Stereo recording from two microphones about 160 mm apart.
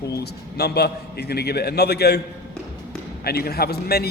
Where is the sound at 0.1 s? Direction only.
90° left.